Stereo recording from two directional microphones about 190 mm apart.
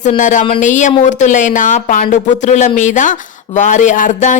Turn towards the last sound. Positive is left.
turn(degrees=40)  # may be behind; listen again after turning